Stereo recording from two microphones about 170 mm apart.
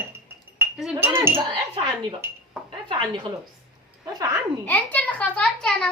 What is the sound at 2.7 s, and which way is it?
Speech, 30° right (ahead or behind).